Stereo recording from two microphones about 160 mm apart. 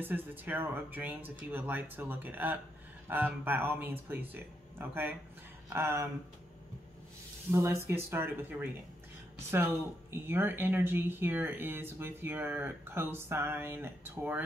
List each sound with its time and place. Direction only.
0.0 s speech: 10° right (ahead or behind)
7.5 s speech: 15° right (ahead or behind)
10.1 s speech: 15° right (ahead or behind)